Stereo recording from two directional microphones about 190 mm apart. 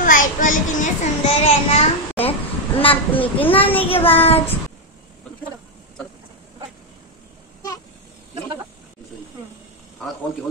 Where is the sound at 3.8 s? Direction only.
30° left (ahead or behind).